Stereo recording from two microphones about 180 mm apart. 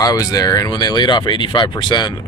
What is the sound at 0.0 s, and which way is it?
Speech, 20° left (ahead or behind).